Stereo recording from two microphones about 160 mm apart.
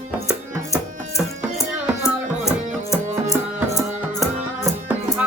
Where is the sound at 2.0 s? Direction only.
20° left (ahead or behind).